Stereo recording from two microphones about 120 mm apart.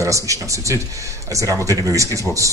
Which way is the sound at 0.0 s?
25° right (ahead or behind).